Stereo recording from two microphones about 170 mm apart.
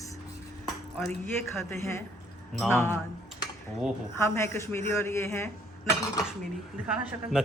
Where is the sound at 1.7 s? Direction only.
15° left (ahead or behind).